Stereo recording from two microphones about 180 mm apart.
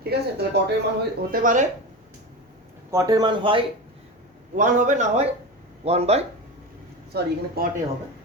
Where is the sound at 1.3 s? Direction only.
45° right (ahead or behind).